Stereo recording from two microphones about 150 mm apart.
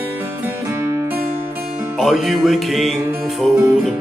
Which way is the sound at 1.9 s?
Centre (ahead or behind).